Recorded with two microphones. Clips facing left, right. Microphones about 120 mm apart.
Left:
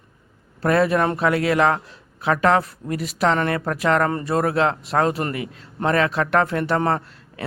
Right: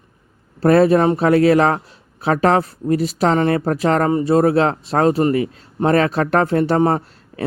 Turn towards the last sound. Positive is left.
turn(degrees=-30)  # may be behind; listen again after turning